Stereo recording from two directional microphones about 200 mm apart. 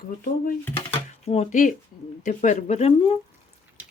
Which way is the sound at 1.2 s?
30° left (ahead or behind).